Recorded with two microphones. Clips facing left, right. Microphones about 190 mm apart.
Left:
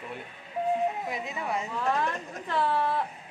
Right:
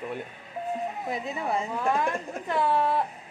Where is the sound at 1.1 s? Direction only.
35° right (ahead or behind).